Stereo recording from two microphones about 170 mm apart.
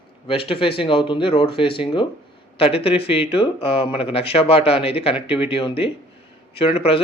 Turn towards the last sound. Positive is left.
turn(degrees=35)  # may be behind; listen again after turning